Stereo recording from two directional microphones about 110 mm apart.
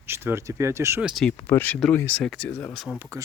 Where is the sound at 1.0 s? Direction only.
5° right (ahead or behind).